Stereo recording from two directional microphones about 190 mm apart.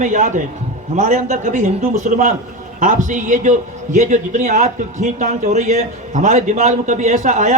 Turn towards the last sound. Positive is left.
turn(degrees=-40)  # may be behind; listen again after turning